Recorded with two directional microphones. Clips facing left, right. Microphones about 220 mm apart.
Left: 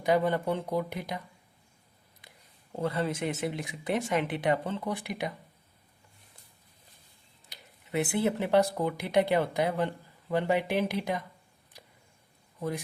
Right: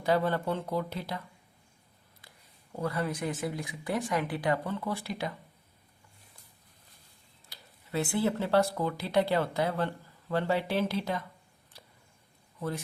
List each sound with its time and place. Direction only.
0.0 s speech: 15° left (ahead or behind)
2.7 s speech: 25° left (ahead or behind)
7.4 s speech: 20° left (ahead or behind)
11.7 s a sound: 15° left (ahead or behind)
12.5 s speech: 15° left (ahead or behind)